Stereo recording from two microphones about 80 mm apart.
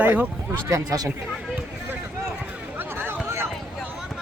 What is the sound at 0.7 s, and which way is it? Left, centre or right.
Speech, right.